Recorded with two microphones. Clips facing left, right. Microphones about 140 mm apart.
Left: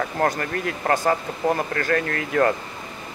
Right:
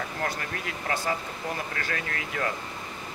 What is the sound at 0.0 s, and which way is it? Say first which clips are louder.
Speech: left 9 dB; 50° left (ahead or behind).